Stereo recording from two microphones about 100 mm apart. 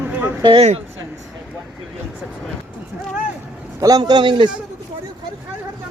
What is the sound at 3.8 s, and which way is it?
Speech, 40° right (ahead or behind).